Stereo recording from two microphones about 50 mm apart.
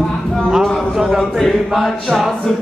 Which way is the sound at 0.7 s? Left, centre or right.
Centre.